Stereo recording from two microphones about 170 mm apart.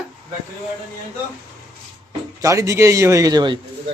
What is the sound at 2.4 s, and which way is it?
Speech, 20° right (ahead or behind).